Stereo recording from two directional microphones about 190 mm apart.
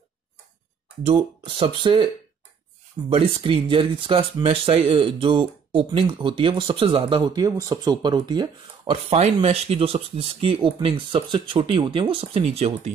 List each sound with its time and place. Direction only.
1.0 s speech: 30° right (ahead or behind)
3.1 s speech: 30° right (ahead or behind)